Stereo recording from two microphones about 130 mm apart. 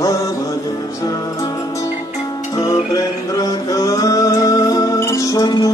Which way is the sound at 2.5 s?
25° left (ahead or behind).